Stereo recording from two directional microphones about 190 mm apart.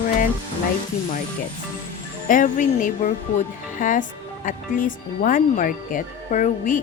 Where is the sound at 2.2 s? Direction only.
45° left (ahead or behind).